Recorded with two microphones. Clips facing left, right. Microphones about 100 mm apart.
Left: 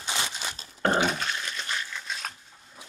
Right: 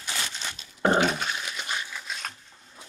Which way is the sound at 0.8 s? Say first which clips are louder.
Right 2 dB; 5° right (ahead or behind).